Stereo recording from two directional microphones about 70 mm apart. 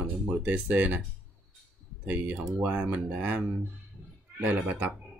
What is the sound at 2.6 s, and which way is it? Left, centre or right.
Speech, right.